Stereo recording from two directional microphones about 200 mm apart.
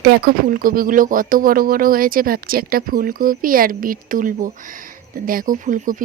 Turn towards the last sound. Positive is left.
turn(degrees=-40)  # may be behind; listen again after turning